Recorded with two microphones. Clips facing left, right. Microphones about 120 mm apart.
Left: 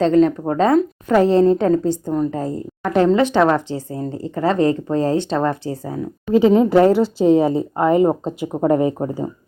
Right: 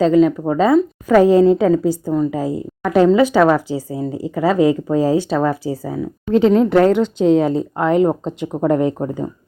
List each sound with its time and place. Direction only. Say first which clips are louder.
0.0 s a woman's voice: right 1 dB; 5° right (ahead or behind)
6.3 s speech: even; 5° left (ahead or behind)
8.2 s speech: even; 15° left (ahead or behind)